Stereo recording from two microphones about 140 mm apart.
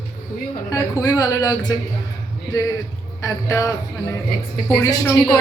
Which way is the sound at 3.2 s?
25° left (ahead or behind).